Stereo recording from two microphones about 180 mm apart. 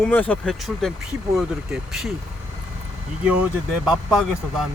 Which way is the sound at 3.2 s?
5° right (ahead or behind).